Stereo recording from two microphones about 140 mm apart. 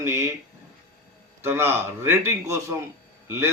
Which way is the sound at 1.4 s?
15° right (ahead or behind).